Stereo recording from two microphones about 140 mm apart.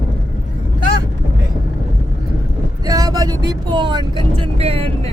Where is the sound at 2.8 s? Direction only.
25° right (ahead or behind); by 5.1 s 45° right (ahead or behind).